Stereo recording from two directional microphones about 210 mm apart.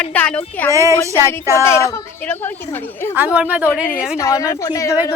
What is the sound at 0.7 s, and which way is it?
Speech, 15° right (ahead or behind).